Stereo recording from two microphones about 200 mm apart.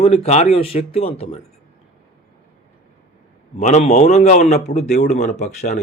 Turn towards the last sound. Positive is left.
turn(degrees=35)  # may be behind; listen again after turning